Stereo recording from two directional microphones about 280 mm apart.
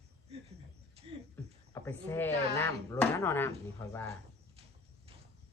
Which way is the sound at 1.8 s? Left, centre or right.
Centre.